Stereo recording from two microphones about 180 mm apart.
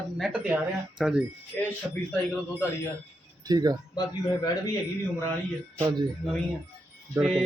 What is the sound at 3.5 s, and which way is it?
Speech, 20° right (ahead or behind).